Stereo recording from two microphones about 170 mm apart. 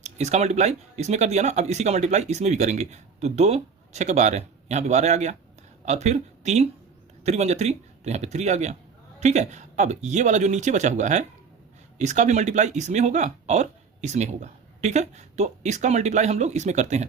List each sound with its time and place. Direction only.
0.0 s speech: 40° right (ahead or behind)